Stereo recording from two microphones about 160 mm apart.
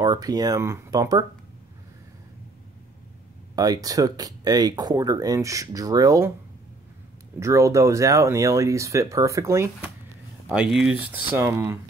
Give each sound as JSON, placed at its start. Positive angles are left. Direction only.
{"t": 0.0, "sound": "speech", "side_deg": -25}
{"t": 3.5, "sound": "speech", "side_deg": -25}
{"t": 7.3, "sound": "speech", "side_deg": -20}
{"t": 11.3, "sound": "speech", "side_deg": -15}